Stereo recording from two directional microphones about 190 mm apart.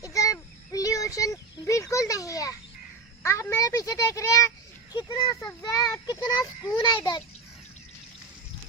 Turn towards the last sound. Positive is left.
turn(degrees=25)  # may be behind; listen again after turning